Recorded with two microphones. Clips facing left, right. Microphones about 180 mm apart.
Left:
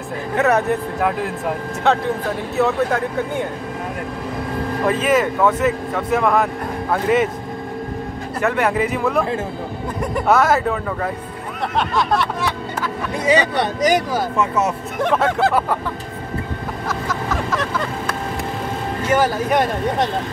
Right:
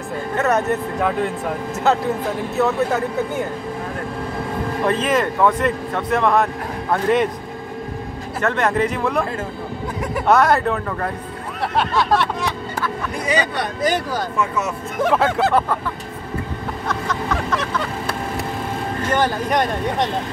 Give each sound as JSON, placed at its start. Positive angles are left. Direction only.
{"t": 0.4, "sound": "speech", "side_deg": 0}
{"t": 4.8, "sound": "speech", "side_deg": 5}
{"t": 8.4, "sound": "speech", "side_deg": 10}
{"t": 12.8, "sound": "speech", "side_deg": 25}
{"t": 13.8, "sound": "speech", "side_deg": 15}
{"t": 15.0, "sound": "speech", "side_deg": 0}
{"t": 16.8, "sound": "vehicle", "side_deg": 5}
{"t": 19.0, "sound": "speech", "side_deg": 5}